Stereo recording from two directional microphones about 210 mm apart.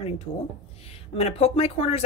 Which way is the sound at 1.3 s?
30° left (ahead or behind).